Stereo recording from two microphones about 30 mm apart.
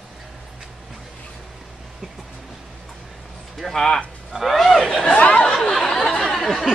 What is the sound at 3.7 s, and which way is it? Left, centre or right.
Speech, centre.